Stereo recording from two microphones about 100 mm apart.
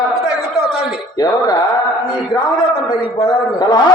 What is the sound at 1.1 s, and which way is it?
Music, 45° left (ahead or behind).